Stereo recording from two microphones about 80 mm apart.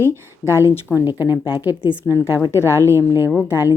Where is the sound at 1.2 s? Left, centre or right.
Right.